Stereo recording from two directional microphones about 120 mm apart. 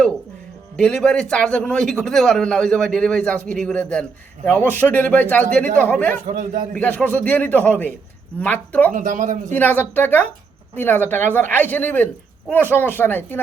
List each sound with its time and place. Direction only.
0.8 s a man's voice: 10° left (ahead or behind)
6.2 s a man's voice: 90° right
6.7 s a man's voice: 10° left (ahead or behind)
9.0 s a man's voice: 90° right
9.5 s a man's voice: 15° left (ahead or behind)